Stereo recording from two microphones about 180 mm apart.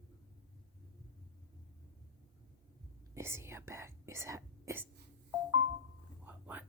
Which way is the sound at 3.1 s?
15° right (ahead or behind).